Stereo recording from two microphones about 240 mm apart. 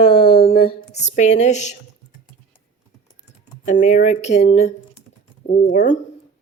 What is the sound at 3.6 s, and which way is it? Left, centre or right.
Speech, left.